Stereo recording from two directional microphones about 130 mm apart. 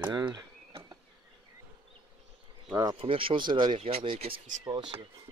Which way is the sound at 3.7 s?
50° right (ahead or behind).